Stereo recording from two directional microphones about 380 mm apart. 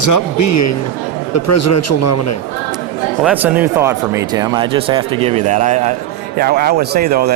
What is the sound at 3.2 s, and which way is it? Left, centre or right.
Speech, centre.